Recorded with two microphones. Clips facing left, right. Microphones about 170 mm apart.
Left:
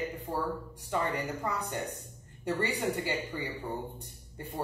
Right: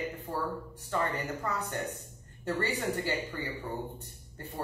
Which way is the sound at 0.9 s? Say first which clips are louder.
Even; 15° left (ahead or behind).